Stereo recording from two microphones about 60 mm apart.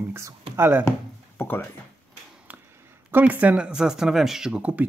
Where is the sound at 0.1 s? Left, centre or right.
Right.